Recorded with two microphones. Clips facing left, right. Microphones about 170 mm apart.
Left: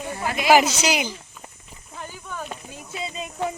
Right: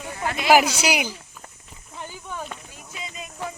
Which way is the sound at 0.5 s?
10° right (ahead or behind).